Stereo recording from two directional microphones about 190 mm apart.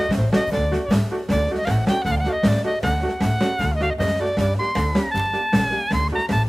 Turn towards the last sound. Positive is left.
turn(degrees=0)  # may be behind; listen again after turning